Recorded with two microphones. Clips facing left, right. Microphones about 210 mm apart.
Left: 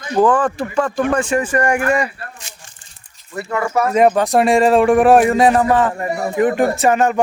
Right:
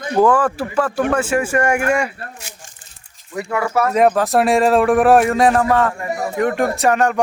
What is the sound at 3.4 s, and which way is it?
Speech, 5° right (ahead or behind).